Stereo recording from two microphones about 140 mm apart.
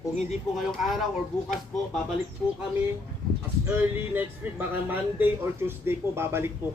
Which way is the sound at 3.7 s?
10° right (ahead or behind).